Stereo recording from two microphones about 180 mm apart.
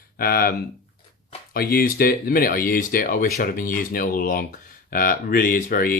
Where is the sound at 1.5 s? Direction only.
55° left (ahead or behind).